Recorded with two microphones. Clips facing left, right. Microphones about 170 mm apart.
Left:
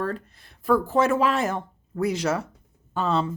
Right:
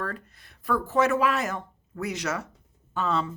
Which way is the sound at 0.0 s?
30° left (ahead or behind).